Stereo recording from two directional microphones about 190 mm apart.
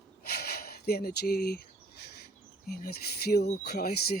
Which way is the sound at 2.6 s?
55° left (ahead or behind).